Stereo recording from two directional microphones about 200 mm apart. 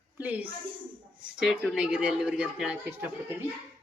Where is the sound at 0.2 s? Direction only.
10° right (ahead or behind).